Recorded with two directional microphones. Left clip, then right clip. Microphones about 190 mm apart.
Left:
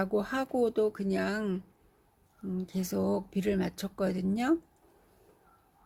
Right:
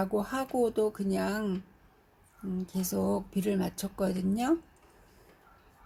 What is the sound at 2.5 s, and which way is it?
Speech, 20° left (ahead or behind).